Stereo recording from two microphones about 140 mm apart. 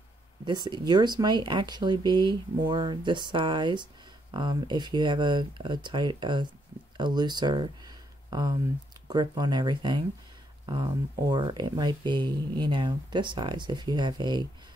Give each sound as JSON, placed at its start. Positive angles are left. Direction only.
{"t": 0.5, "sound": "speech", "side_deg": -30}